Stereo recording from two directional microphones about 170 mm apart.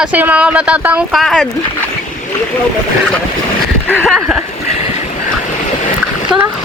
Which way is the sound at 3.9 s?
10° left (ahead or behind).